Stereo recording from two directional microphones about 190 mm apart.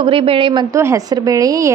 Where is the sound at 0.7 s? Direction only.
15° right (ahead or behind).